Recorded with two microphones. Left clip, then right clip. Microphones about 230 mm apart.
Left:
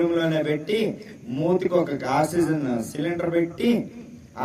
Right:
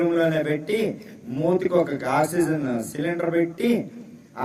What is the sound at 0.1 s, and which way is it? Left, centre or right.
Speech, centre.